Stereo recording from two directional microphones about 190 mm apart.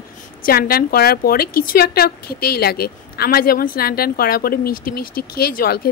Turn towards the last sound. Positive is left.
turn(degrees=55)  # may be behind; listen again after turning